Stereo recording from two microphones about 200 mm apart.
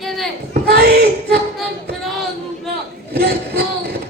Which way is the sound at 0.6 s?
50° right (ahead or behind).